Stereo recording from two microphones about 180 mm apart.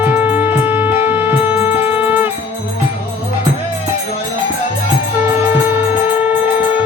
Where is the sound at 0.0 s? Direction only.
10° right (ahead or behind).